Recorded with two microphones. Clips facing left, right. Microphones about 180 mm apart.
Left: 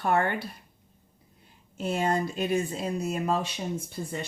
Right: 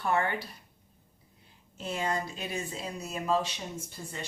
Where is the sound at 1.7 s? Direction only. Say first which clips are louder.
Left 5 dB; 50° left (ahead or behind).